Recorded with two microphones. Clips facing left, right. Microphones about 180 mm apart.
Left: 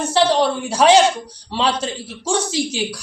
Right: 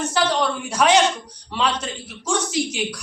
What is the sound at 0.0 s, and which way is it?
A woman's voice, 30° left (ahead or behind).